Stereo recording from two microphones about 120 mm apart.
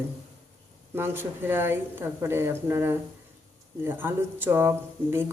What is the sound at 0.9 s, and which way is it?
Speech, 20° right (ahead or behind).